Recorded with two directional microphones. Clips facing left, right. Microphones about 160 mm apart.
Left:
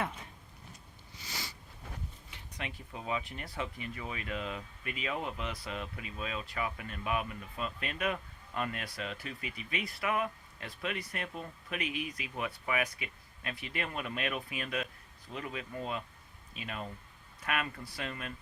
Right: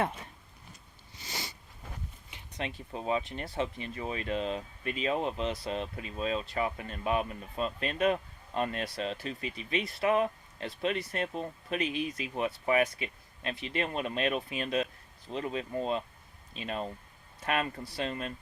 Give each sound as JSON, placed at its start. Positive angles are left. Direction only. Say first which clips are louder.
{"t": 1.2, "sound": "sniff", "louder": "right 3 dB", "side_deg": -20}
{"t": 2.6, "sound": "speech", "louder": "right 5 dB", "side_deg": -30}